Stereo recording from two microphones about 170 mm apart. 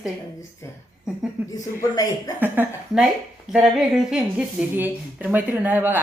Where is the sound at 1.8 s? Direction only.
20° left (ahead or behind).